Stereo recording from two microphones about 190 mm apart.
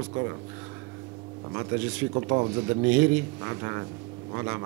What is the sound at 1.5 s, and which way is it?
Speech, 10° right (ahead or behind).